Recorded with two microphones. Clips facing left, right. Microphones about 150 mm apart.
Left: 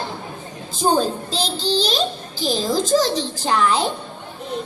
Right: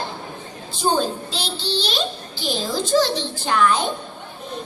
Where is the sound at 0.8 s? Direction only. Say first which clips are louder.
Left 2 dB; 40° left (ahead or behind).